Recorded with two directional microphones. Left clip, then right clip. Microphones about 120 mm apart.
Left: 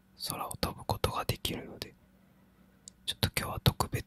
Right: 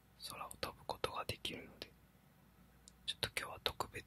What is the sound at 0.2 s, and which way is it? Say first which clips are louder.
Whispering: left 10 dB; 25° left (ahead or behind).